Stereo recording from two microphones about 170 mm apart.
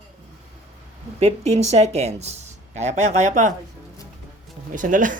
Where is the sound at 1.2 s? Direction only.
40° right (ahead or behind).